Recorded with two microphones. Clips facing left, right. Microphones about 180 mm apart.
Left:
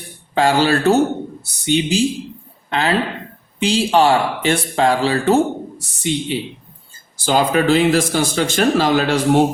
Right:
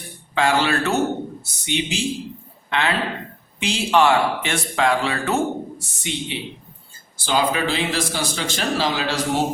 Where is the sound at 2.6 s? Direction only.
35° left (ahead or behind).